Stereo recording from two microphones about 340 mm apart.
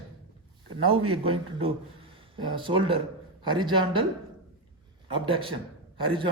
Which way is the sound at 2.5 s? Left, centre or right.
Centre.